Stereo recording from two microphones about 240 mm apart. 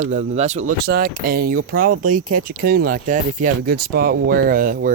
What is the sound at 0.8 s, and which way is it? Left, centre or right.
Speech, right.